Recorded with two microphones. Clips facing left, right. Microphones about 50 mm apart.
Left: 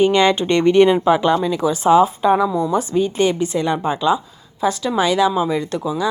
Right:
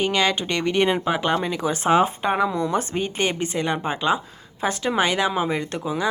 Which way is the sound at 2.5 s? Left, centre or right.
Right.